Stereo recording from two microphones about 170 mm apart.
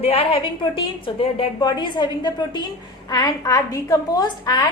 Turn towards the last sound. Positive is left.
turn(degrees=25)  # may be behind; listen again after turning